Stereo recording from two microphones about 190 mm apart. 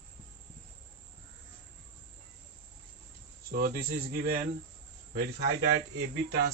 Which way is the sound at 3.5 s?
50° right (ahead or behind).